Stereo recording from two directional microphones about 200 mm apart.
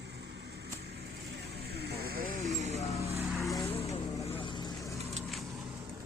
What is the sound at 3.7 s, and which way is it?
Vehicle, 30° left (ahead or behind).